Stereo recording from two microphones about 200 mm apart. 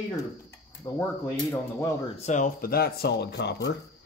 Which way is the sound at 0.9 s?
10° left (ahead or behind).